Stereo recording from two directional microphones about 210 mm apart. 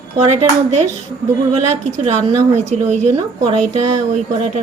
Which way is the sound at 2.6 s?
35° right (ahead or behind).